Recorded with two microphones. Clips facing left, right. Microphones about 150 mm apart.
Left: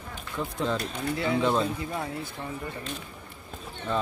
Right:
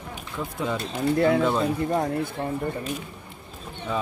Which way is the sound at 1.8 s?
50° right (ahead or behind).